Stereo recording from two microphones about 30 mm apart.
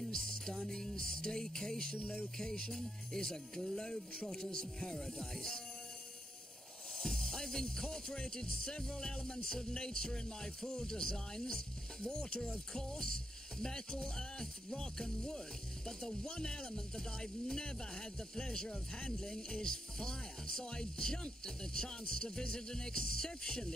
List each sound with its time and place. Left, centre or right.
0.1 s music: left
2.3 s speech: left
7.0 s music: centre
8.4 s speech: left
9.1 s music: left
9.5 s speech: left